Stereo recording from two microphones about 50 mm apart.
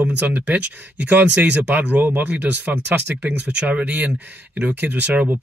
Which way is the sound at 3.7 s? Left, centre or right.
Right.